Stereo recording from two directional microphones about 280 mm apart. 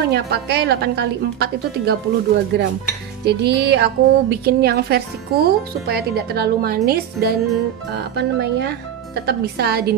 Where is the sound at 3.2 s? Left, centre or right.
Right.